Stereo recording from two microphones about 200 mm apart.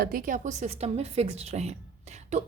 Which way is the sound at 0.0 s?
45° right (ahead or behind).